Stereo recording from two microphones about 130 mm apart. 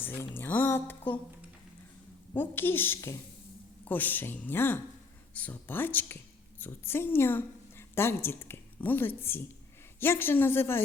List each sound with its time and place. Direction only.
0.0 s speech: 15° left (ahead or behind)
2.3 s a woman's voice: 15° left (ahead or behind)